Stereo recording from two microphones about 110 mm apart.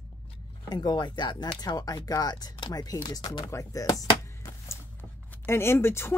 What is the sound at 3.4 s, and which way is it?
Speech, 30° left (ahead or behind).